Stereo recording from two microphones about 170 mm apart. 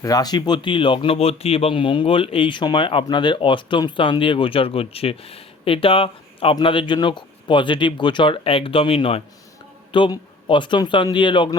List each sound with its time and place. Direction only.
0.0 s speech: 20° left (ahead or behind)